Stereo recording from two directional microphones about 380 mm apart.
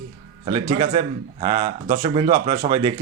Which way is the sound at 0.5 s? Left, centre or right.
Centre.